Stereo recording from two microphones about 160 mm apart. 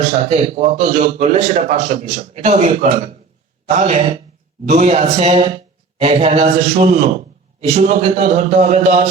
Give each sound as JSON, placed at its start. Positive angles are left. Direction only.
{"t": 0.3, "sound": "a man's voice", "side_deg": -40}